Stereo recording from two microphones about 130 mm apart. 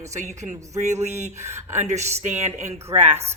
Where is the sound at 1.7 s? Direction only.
65° right (ahead or behind).